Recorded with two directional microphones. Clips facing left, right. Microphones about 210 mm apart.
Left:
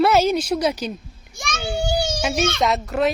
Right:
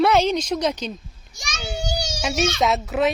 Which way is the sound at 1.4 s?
55° left (ahead or behind).